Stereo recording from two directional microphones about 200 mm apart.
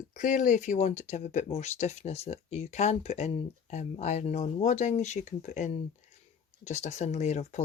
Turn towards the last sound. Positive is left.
turn(degrees=35)  # may be behind; listen again after turning